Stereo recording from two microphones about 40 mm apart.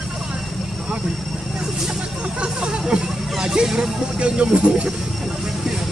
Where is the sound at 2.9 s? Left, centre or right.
Centre.